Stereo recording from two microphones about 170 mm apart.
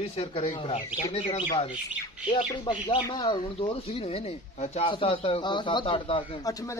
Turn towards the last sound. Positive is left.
turn(degrees=30)  # may be behind; listen again after turning